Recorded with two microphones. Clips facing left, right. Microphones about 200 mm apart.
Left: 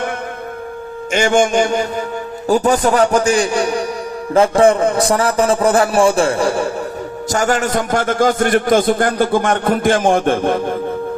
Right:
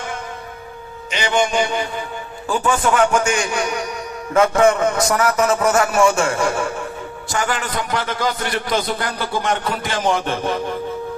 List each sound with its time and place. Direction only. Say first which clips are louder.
1.1 s a man's voice: left 5 dB; 45° left (ahead or behind)